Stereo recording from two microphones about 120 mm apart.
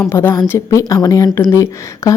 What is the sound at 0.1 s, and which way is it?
A woman's voice, 20° left (ahead or behind).